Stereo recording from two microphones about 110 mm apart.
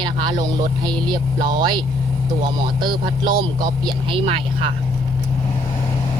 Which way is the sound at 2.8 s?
40° right (ahead or behind).